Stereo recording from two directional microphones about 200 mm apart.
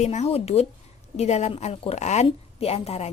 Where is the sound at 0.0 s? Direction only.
35° left (ahead or behind).